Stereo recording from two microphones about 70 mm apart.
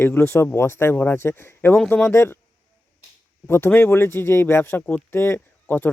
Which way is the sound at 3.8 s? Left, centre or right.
Left.